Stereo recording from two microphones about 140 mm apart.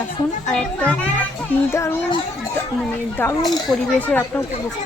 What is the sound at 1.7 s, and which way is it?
Speech, 20° left (ahead or behind).